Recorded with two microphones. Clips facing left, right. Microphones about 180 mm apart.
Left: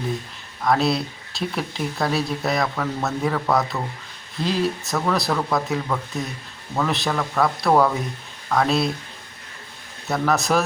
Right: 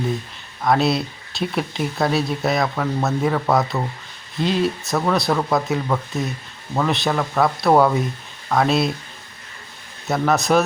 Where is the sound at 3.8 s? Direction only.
15° right (ahead or behind).